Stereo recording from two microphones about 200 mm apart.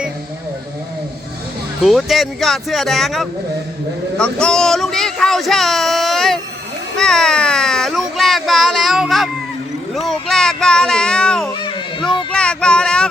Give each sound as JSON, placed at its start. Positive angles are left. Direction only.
{"t": 1.8, "sound": "speech", "side_deg": 0}
{"t": 11.5, "sound": "children playing", "side_deg": 25}
{"t": 12.3, "sound": "a sound", "side_deg": 5}